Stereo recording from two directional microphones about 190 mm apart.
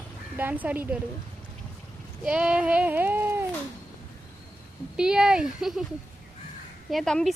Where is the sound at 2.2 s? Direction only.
5° right (ahead or behind).